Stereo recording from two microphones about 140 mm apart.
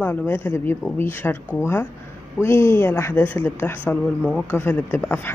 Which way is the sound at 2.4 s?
20° left (ahead or behind).